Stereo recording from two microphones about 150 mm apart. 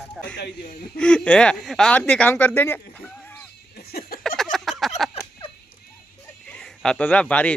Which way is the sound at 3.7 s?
90° left.